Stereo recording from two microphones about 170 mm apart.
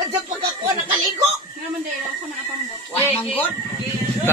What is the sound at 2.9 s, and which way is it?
Speech, 35° left (ahead or behind).